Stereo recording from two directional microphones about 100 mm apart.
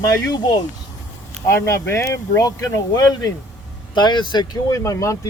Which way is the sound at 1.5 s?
30° left (ahead or behind).